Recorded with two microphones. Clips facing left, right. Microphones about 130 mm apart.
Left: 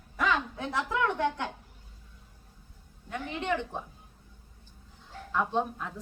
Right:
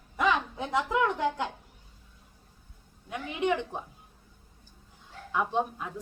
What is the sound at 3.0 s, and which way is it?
Speech, 10° right (ahead or behind).